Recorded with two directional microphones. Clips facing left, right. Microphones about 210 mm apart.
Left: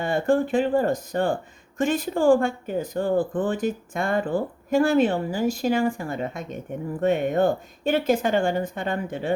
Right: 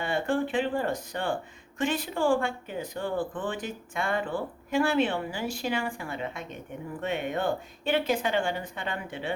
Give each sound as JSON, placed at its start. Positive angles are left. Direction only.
{"t": 0.0, "sound": "speech", "side_deg": 45}